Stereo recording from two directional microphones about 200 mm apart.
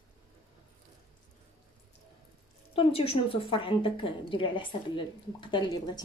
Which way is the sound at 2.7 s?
25° left (ahead or behind).